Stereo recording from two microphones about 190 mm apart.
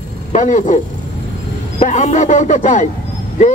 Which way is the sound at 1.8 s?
40° left (ahead or behind).